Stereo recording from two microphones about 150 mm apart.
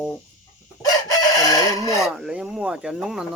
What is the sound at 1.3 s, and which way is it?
Crowing, 25° left (ahead or behind).